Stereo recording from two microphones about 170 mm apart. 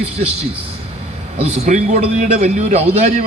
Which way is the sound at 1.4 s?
40° right (ahead or behind).